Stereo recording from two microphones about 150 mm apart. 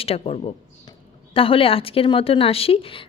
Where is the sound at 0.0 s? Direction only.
40° left (ahead or behind).